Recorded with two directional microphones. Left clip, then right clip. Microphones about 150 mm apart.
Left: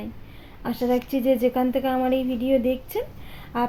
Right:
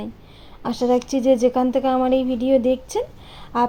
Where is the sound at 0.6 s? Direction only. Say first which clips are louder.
Right 4 dB; 30° right (ahead or behind).